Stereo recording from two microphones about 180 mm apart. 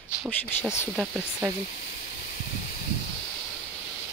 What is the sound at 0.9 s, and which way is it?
Speech, 5° right (ahead or behind).